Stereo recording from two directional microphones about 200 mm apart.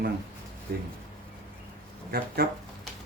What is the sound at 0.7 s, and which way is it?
Speech, 55° right (ahead or behind).